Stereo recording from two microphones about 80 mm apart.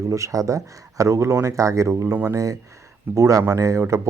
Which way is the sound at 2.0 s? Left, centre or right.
Right.